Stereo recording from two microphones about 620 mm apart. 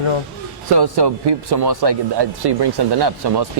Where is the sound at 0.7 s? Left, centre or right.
Right.